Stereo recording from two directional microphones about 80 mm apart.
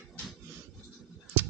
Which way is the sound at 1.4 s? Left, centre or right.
Right.